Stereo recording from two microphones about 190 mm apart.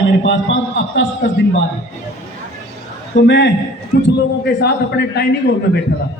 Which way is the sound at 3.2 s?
65° left (ahead or behind).